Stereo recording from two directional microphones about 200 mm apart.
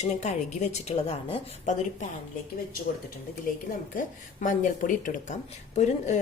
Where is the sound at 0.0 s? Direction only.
35° left (ahead or behind).